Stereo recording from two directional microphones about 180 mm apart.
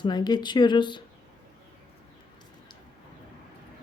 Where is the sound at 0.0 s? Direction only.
25° left (ahead or behind).